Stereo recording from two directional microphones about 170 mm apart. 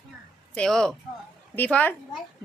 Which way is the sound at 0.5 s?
5° left (ahead or behind).